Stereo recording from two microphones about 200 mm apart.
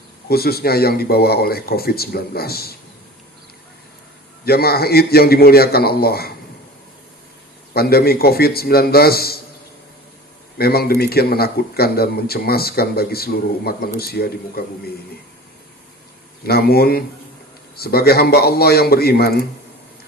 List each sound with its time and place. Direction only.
0.3 s speech: 50° left (ahead or behind)
4.4 s speech: 50° left (ahead or behind)
7.7 s speech: 50° left (ahead or behind)
10.6 s speech: 50° left (ahead or behind)
16.5 s speech: 50° left (ahead or behind)